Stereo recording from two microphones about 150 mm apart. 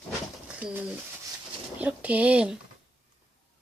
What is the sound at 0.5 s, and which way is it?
Speech, 10° right (ahead or behind).